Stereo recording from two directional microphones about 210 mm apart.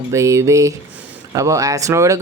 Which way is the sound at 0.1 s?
15° right (ahead or behind).